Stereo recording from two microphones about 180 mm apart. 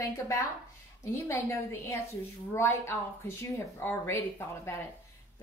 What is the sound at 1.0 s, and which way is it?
Speech, 15° left (ahead or behind).